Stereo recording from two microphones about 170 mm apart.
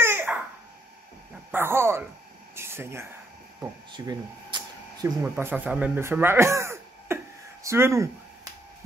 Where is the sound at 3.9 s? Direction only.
25° right (ahead or behind).